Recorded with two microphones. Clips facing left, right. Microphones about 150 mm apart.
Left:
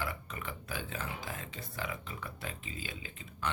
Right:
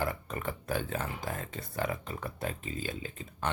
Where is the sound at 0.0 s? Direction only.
45° right (ahead or behind).